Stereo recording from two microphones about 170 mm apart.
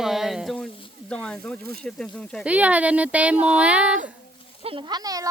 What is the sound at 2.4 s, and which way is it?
Speech, 10° right (ahead or behind).